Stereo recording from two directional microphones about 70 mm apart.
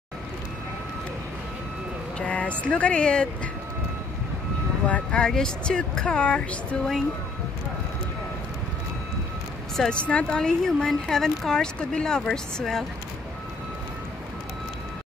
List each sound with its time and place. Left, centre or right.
2.1 s speech: centre
4.8 s speech: centre
9.8 s speech: centre